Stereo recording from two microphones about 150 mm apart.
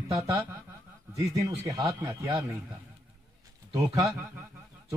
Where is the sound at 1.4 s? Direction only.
20° right (ahead or behind).